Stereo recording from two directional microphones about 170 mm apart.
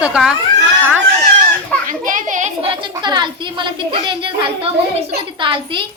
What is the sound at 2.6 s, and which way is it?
Speech, 30° right (ahead or behind).